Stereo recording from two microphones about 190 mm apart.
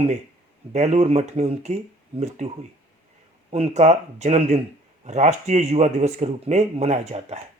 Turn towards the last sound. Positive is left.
turn(degrees=-35)  # may be behind; listen again after turning